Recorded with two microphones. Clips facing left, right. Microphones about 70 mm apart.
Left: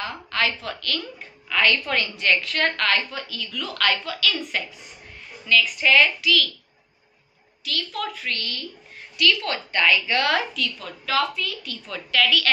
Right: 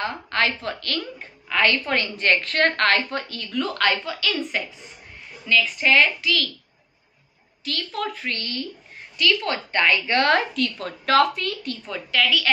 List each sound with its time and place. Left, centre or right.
0.0 s a woman's voice: right
3.7 s a woman's voice: right
7.6 s a woman's voice: right
11.9 s a woman's voice: centre